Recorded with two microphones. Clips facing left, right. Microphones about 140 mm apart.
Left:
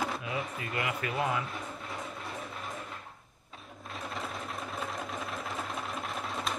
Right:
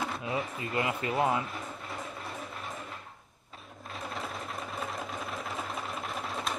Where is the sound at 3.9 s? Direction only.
Centre (ahead or behind).